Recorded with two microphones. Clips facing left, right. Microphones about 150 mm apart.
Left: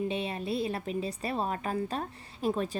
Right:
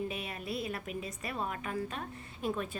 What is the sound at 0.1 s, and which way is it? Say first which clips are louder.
A woman's voice: left 6 dB; 30° left (ahead or behind).